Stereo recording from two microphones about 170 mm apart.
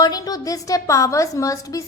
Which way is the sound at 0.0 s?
20° left (ahead or behind).